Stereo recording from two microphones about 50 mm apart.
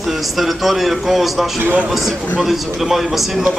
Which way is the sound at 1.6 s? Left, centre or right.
Right.